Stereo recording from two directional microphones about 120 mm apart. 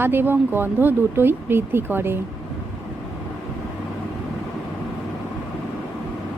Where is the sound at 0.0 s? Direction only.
20° right (ahead or behind).